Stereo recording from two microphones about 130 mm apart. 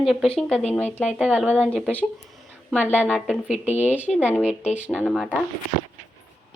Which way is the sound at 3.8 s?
10° right (ahead or behind).